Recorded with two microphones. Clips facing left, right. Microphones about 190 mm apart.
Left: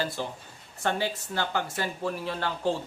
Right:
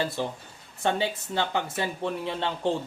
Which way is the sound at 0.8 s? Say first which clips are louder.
Right 2 dB; 20° right (ahead or behind).